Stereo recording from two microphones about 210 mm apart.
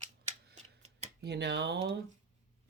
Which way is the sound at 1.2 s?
50° right (ahead or behind).